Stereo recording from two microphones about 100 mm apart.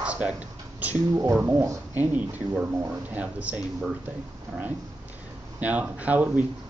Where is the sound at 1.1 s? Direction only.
35° right (ahead or behind).